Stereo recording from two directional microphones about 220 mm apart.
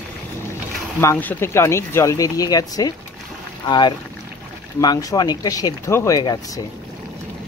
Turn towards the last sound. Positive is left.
turn(degrees=15)  # may be behind; listen again after turning